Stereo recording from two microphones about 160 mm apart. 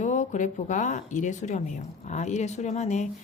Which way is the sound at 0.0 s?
50° left (ahead or behind).